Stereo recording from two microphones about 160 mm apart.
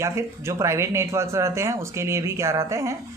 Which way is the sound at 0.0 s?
20° right (ahead or behind).